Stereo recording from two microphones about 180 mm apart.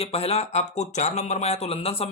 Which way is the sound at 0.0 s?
35° left (ahead or behind).